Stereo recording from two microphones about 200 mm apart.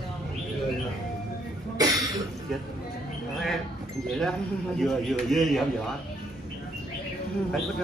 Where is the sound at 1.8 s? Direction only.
15° right (ahead or behind).